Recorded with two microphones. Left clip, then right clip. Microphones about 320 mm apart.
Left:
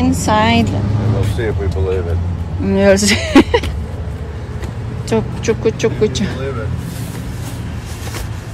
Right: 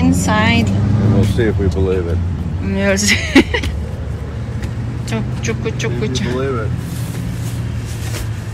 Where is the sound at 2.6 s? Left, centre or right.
Centre.